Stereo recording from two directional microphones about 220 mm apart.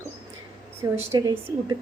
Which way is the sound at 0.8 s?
15° right (ahead or behind).